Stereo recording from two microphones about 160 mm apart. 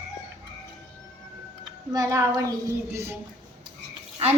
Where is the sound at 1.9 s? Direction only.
20° right (ahead or behind).